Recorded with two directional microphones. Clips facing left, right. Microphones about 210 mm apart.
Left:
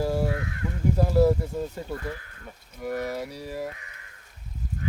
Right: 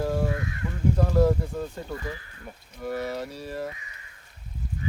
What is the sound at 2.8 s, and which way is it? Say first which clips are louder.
Speech: even; 10° left (ahead or behind).